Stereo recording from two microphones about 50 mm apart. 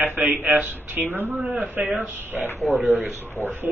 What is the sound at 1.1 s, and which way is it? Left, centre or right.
Speech, right.